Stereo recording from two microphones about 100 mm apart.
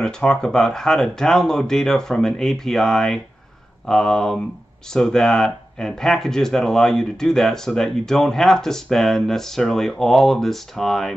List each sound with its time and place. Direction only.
0.0 s speech: 5° left (ahead or behind)